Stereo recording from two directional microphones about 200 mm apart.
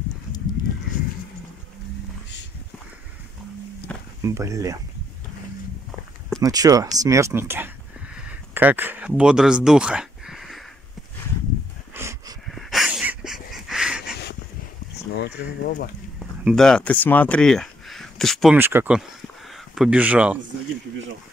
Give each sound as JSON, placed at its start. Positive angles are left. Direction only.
{"t": 4.2, "sound": "speech", "side_deg": -15}
{"t": 6.4, "sound": "speech", "side_deg": -20}
{"t": 11.9, "sound": "a sound", "side_deg": -15}
{"t": 12.4, "sound": "dog", "side_deg": 0}
{"t": 15.1, "sound": "speech", "side_deg": 55}
{"t": 16.2, "sound": "speech", "side_deg": 0}
{"t": 18.6, "sound": "speech", "side_deg": -10}